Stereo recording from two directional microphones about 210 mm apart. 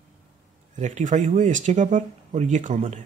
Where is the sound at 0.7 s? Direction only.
35° right (ahead or behind).